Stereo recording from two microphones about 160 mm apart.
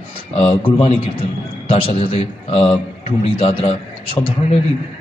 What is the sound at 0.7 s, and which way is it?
A man's voice, 35° left (ahead or behind).